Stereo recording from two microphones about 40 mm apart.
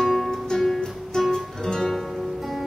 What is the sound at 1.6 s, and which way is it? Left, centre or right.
Music, centre.